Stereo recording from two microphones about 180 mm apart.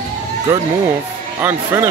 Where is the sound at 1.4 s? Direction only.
15° right (ahead or behind).